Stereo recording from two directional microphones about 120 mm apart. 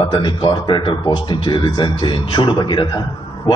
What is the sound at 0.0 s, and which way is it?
Speech, 40° left (ahead or behind).